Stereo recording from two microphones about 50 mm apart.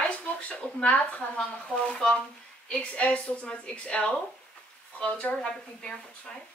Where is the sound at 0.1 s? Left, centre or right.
Left.